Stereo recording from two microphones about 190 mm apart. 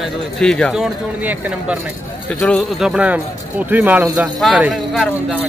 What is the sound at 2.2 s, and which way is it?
Speech, 5° left (ahead or behind).